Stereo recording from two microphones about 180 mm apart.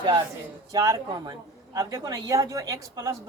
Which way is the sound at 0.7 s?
20° right (ahead or behind).